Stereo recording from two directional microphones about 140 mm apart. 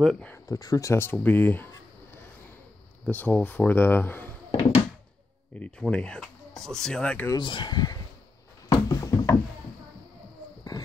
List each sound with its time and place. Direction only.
0.0 s speech: 5° left (ahead or behind)
0.3 s speech: 25° left (ahead or behind)
3.1 s speech: 10° left (ahead or behind)
5.6 s speech: 10° left (ahead or behind)
7.2 s speech: 35° left (ahead or behind)
8.6 s a sound: 25° left (ahead or behind)